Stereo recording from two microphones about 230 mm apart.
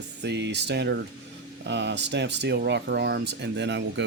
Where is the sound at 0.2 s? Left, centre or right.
Right.